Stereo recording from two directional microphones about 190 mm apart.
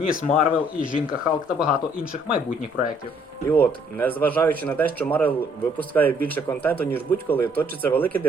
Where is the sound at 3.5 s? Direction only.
10° left (ahead or behind).